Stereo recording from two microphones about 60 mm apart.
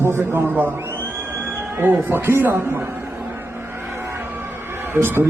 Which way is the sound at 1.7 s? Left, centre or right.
Right.